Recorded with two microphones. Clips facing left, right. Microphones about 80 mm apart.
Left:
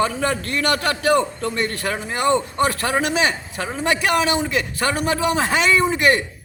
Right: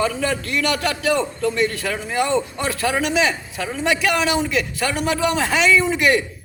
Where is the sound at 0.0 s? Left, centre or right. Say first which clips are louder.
Left 1 dB; left.